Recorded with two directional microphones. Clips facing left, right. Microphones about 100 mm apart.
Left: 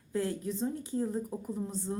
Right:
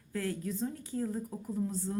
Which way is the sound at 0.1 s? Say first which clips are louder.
Left 3 dB; 25° left (ahead or behind).